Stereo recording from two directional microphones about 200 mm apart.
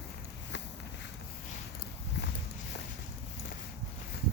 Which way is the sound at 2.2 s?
55° left (ahead or behind).